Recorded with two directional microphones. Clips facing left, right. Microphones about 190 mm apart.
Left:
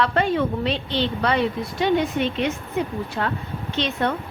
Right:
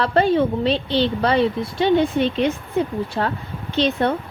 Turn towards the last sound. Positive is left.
turn(degrees=-30)  # may be behind; listen again after turning